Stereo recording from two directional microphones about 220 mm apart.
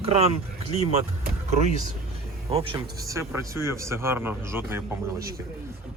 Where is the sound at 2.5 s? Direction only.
25° right (ahead or behind).